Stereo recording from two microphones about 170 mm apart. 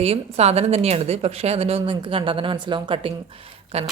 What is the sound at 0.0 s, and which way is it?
A woman's voice, 35° right (ahead or behind).